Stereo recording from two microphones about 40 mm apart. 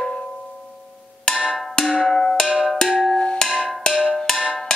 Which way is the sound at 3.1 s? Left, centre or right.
Left.